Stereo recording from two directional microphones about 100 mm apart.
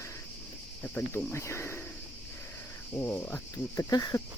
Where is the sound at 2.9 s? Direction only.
30° left (ahead or behind).